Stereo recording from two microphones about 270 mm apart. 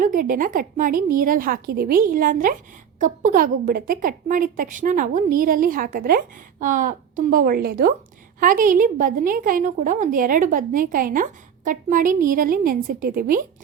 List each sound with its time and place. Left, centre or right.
0.0 s a woman's voice: right